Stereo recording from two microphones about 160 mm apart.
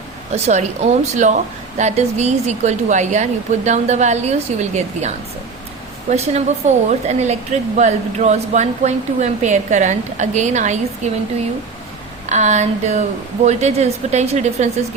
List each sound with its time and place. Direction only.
0.3 s speech: 45° right (ahead or behind)
12.2 s speech: 45° right (ahead or behind)